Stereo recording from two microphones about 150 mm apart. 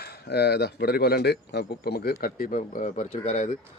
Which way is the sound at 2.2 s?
70° left (ahead or behind).